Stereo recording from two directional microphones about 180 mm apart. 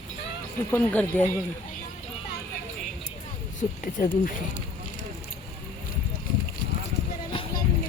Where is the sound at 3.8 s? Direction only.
45° left (ahead or behind).